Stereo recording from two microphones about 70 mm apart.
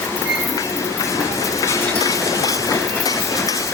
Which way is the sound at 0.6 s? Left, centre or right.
Left.